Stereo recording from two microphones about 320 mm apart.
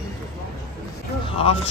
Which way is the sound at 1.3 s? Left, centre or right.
Centre.